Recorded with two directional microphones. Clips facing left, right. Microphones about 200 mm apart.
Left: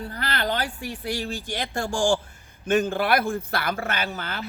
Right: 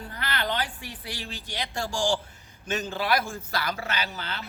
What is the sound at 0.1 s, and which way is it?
Speech, 40° left (ahead or behind).